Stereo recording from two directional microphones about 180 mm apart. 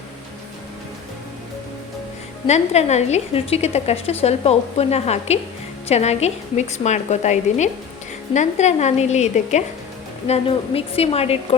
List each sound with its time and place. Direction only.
2.5 s a woman's voice: 40° left (ahead or behind)